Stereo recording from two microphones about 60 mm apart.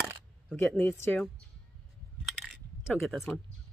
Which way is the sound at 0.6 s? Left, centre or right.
Centre.